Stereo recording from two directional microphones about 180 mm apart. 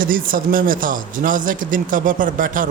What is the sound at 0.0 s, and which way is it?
A man's voice, 50° right (ahead or behind).